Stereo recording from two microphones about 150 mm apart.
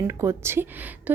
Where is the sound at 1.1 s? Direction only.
10° right (ahead or behind).